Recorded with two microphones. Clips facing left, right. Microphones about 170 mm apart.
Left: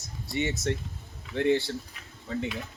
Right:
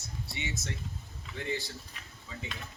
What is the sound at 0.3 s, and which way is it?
A man's voice, 55° left (ahead or behind).